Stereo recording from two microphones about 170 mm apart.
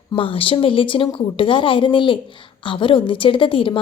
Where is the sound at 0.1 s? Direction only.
30° left (ahead or behind).